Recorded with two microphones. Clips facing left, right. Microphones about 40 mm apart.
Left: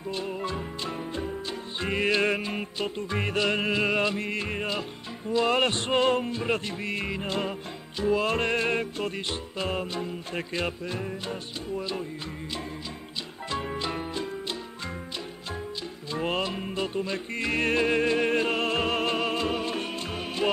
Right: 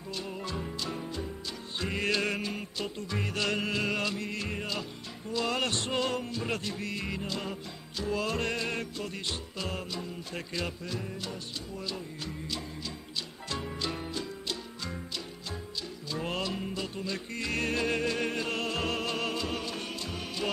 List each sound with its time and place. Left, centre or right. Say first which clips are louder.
0.1 s music: left 5 dB; left
13.5 s music: left 5 dB; left
16.1 s music: left 5 dB; left